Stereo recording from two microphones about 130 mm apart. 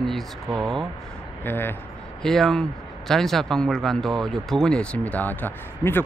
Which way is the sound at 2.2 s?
5° left (ahead or behind).